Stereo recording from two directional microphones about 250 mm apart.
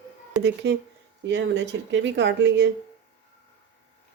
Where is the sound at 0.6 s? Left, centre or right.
Right.